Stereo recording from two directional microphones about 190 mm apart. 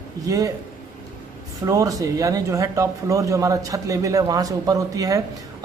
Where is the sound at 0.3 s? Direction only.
20° right (ahead or behind).